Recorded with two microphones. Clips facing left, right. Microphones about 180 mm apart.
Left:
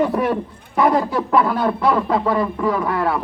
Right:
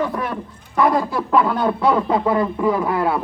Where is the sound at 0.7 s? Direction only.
10° left (ahead or behind).